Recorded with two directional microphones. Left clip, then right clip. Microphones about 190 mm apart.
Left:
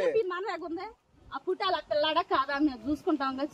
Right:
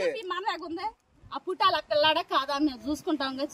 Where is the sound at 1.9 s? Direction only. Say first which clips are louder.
Right 3 dB; 70° right (ahead or behind).